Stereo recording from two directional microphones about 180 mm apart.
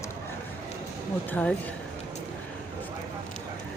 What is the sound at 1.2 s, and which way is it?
Speech, 10° left (ahead or behind).